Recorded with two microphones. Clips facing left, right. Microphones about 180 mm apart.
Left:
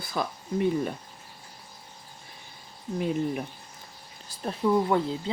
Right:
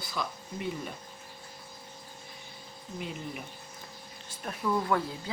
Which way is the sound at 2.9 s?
45° left (ahead or behind).